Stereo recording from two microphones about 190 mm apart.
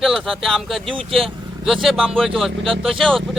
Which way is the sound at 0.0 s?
Centre (ahead or behind).